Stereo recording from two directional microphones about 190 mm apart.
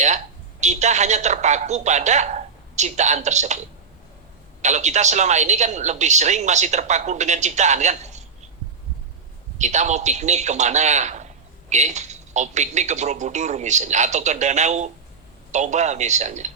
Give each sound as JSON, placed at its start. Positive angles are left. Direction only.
{"t": 0.6, "sound": "a woman's voice", "side_deg": -35}
{"t": 4.6, "sound": "speech", "side_deg": -40}
{"t": 9.6, "sound": "speech", "side_deg": -40}